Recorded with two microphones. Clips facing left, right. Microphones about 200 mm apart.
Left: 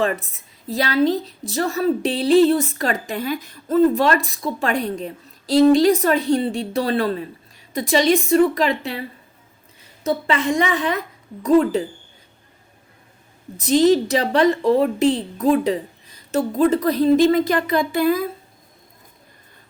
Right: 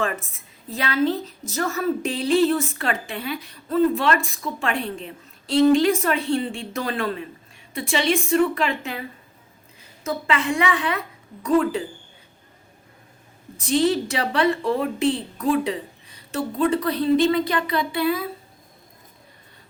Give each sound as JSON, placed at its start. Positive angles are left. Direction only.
{"t": 0.0, "sound": "a woman's voice", "side_deg": 35}
{"t": 13.6, "sound": "a woman's voice", "side_deg": 40}